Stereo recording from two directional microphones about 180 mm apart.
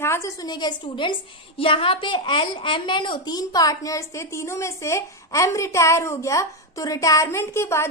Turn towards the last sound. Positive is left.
turn(degrees=15)  # may be behind; listen again after turning